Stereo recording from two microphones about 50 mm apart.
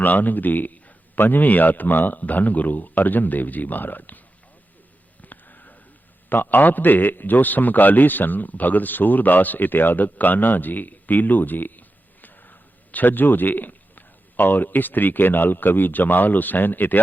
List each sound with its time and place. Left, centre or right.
0.0 s a man's voice: left
5.2 s a sound: left
6.2 s a man's voice: left